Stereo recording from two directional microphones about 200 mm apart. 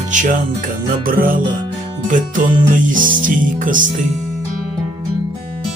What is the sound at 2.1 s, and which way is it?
Music, 40° right (ahead or behind).